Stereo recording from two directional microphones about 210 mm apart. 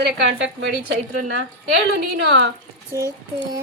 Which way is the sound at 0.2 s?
60° right (ahead or behind).